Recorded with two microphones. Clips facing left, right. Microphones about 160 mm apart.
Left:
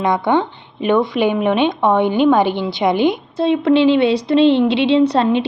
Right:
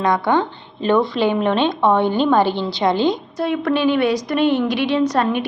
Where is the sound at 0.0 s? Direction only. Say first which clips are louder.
Left 1 dB; 20° left (ahead or behind).